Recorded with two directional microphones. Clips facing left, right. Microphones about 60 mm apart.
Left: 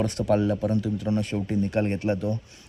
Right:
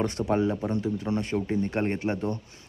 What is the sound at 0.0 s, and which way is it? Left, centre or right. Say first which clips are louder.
Speech: left 2 dB; right.